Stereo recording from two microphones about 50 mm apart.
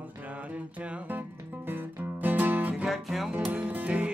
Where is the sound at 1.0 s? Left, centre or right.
Right.